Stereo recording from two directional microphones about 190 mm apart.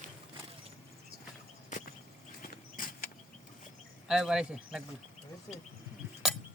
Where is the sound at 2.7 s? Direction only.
45° left (ahead or behind).